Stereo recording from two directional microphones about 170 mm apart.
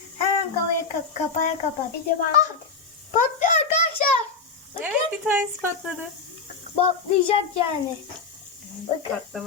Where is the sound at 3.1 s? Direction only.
45° left (ahead or behind).